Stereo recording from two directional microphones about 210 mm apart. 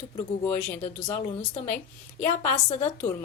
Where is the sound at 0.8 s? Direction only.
30° left (ahead or behind).